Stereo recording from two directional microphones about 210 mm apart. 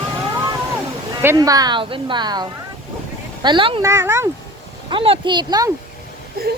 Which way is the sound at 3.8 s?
15° right (ahead or behind).